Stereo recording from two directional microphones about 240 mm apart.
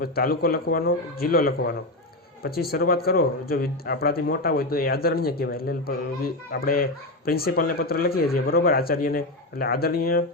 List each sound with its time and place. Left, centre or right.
0.0 s speech: left